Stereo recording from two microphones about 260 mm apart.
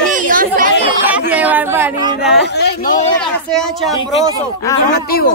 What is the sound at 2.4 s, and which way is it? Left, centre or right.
Speech, left.